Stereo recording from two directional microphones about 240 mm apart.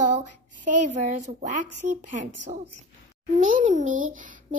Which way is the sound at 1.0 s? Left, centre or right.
Right.